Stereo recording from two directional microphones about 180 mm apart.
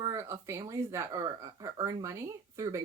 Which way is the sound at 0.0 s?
15° right (ahead or behind).